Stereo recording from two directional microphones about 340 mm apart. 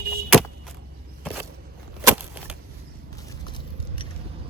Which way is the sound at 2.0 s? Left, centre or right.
Centre.